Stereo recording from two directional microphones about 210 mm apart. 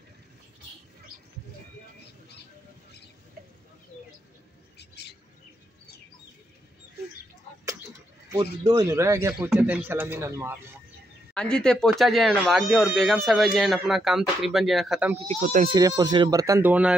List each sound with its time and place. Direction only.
4.7 s bird: 50° left (ahead or behind)
7.6 s a sound: 15° right (ahead or behind)
8.6 s speech: 15° right (ahead or behind)
11.3 s speech: 5° left (ahead or behind)
15.6 s speech: 20° right (ahead or behind)